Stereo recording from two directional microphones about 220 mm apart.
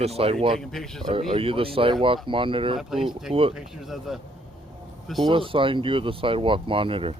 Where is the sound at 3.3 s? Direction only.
25° right (ahead or behind).